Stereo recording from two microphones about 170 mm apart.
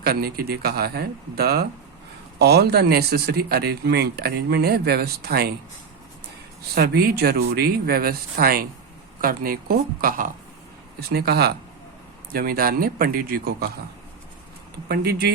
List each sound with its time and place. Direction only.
0.0 s speech: 65° right (ahead or behind)
6.7 s a man's voice: 65° right (ahead or behind)
11.1 s a man's voice: 70° right (ahead or behind)
14.8 s speech: 70° right (ahead or behind)